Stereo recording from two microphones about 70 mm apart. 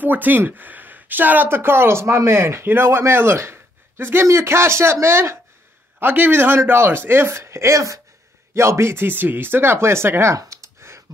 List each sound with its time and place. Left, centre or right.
0.0 s speech: right
5.9 s speech: right